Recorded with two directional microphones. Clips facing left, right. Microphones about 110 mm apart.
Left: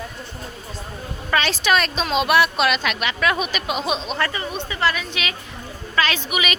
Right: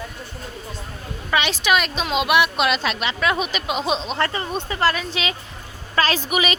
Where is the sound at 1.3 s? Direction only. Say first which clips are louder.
Even; 15° right (ahead or behind).